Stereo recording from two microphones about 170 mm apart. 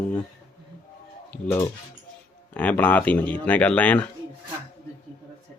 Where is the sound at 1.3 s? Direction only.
10° left (ahead or behind).